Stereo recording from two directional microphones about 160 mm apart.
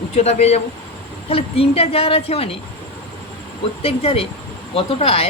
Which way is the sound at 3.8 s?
35° left (ahead or behind).